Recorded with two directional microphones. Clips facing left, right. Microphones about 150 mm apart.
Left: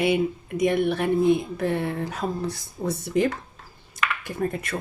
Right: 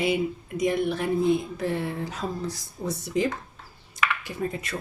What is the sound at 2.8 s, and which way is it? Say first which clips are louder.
Speech: left 3 dB; 75° left (ahead or behind).